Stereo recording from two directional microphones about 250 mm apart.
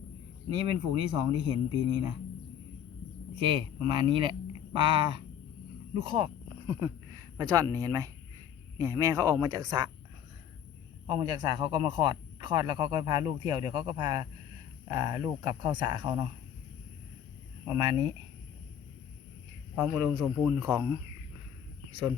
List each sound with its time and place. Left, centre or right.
1.1 s speech: centre
3.4 s speech: centre
11.0 s speech: centre
17.7 s speech: centre
19.8 s a man's voice: centre